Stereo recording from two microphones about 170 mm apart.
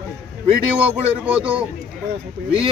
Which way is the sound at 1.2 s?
10° right (ahead or behind).